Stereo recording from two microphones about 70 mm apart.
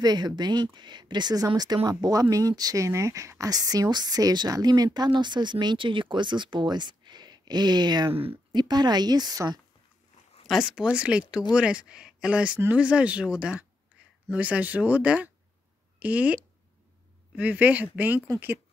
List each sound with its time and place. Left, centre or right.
0.0 s speech: right
2.8 s speech: right
10.4 s speech: centre
17.4 s speech: right